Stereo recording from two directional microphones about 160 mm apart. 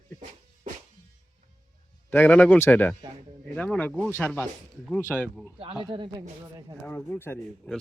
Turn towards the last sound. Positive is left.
turn(degrees=10)  # may be behind; listen again after turning